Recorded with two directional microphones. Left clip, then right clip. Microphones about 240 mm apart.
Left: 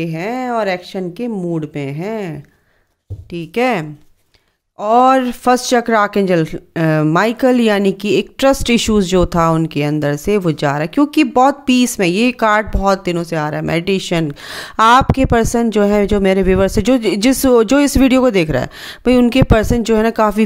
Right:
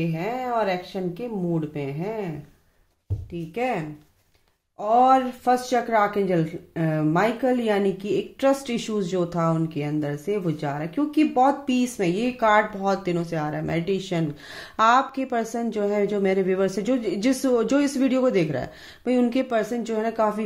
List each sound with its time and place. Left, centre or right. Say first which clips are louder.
0.0 s speech: left 7 dB; left